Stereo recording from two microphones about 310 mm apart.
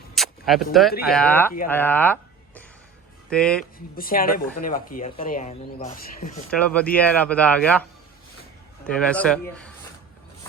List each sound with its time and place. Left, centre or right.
0.1 s a sound: centre
1.1 s speech: centre
3.2 s speech: centre
3.9 s speech: left
6.5 s speech: centre
9.0 s speech: centre